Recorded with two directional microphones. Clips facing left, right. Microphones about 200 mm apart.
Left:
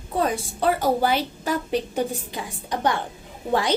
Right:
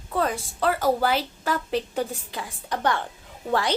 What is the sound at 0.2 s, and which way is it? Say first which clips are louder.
A woman's voice: left 2 dB; 20° left (ahead or behind).